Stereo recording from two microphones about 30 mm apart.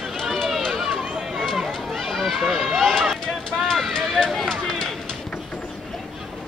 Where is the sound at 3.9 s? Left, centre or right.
Centre.